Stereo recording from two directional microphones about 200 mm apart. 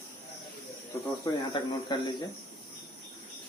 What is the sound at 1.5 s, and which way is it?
Speech, 20° left (ahead or behind).